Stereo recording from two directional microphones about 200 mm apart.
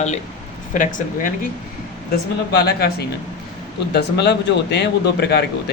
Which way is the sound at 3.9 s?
55° left (ahead or behind).